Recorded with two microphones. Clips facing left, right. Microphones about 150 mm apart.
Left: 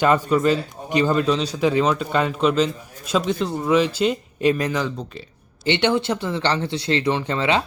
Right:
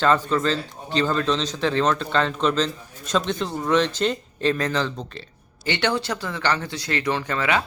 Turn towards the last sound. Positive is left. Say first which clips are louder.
# left 3 dB
turn(degrees=25)  # may be behind; listen again after turning